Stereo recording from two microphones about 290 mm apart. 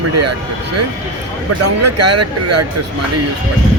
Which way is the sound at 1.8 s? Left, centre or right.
Right.